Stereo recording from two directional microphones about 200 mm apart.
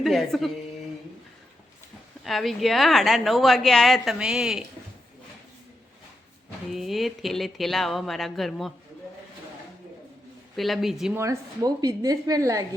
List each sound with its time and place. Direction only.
0.0 s a woman's voice: centre (ahead or behind)
2.2 s a woman's voice: centre (ahead or behind)
6.7 s a woman's voice: centre (ahead or behind)
10.6 s a woman's voice: centre (ahead or behind)
11.2 s a woman's voice: 15° right (ahead or behind)